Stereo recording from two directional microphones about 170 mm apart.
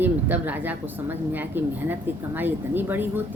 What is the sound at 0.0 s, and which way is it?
Speech, 10° right (ahead or behind).